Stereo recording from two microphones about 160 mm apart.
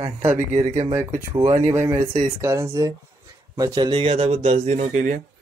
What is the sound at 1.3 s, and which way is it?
A man's voice, 25° right (ahead or behind).